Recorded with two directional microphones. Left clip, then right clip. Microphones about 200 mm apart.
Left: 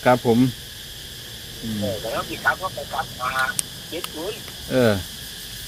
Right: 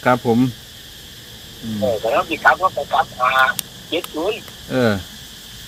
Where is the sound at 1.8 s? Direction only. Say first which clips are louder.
Right 9 dB; 55° right (ahead or behind).